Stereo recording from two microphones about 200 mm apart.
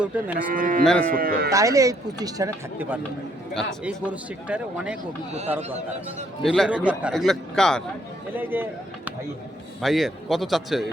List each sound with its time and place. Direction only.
0.0 s speech: 5° right (ahead or behind)
0.5 s speech: 45° right (ahead or behind)
1.5 s speech: 15° right (ahead or behind)
6.4 s a man's voice: centre (ahead or behind)
8.4 s a man's voice: 10° right (ahead or behind)